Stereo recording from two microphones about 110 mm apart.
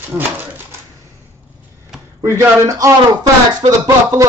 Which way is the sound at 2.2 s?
30° right (ahead or behind).